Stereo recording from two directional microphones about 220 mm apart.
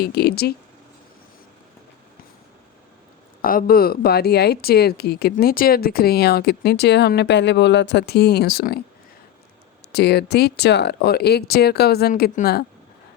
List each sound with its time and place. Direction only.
0.0 s speech: 45° left (ahead or behind)
3.4 s speech: 40° left (ahead or behind)
9.9 s speech: 50° left (ahead or behind)